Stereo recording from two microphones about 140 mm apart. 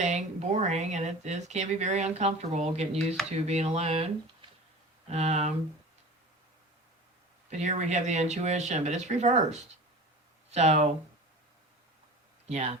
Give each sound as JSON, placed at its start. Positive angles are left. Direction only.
{"t": 0.0, "sound": "speech", "side_deg": -55}
{"t": 7.5, "sound": "speech", "side_deg": -55}
{"t": 12.5, "sound": "speech", "side_deg": -55}